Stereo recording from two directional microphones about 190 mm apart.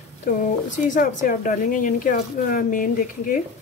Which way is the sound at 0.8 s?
45° left (ahead or behind).